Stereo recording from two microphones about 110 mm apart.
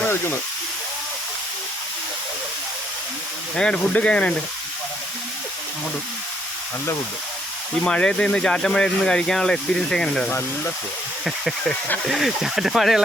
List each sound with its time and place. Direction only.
0.0 s hiss: 20° left (ahead or behind)
3.6 s speech: 10° left (ahead or behind)
7.9 s speech: 10° left (ahead or behind)